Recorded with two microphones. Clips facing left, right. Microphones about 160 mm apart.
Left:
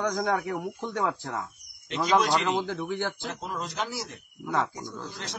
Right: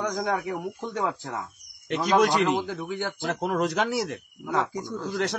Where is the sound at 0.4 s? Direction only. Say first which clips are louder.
Right 1 dB; centre (ahead or behind).